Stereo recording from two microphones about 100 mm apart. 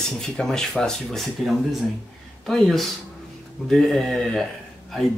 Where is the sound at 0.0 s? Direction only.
5° left (ahead or behind).